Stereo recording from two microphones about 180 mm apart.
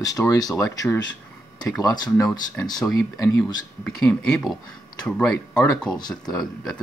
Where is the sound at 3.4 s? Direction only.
5° left (ahead or behind).